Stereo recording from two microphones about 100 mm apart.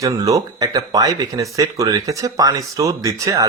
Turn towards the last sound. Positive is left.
turn(degrees=-35)  # may be behind; listen again after turning